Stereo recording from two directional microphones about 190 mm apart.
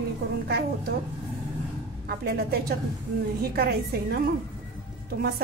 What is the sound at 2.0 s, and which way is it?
A woman's voice, 55° right (ahead or behind).